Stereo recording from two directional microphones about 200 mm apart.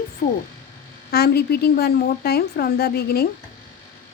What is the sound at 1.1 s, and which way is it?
A woman's voice, 55° left (ahead or behind).